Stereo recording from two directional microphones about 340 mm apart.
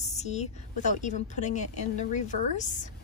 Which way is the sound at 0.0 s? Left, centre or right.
Centre.